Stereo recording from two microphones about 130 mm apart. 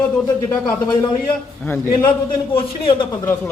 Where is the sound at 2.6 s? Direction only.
40° left (ahead or behind).